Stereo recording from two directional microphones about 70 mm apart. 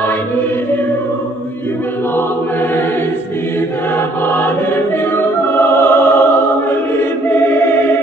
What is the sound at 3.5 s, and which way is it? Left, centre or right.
Choir, left.